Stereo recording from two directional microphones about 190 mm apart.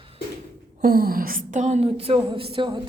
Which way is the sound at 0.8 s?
55° right (ahead or behind).